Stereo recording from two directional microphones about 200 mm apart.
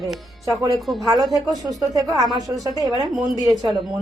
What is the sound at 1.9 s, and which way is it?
Speech, 15° right (ahead or behind).